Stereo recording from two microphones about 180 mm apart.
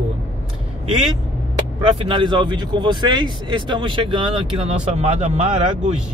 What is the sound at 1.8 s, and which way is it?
Speech, 30° right (ahead or behind).